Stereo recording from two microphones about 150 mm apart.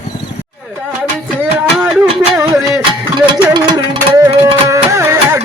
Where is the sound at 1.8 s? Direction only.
20° right (ahead or behind).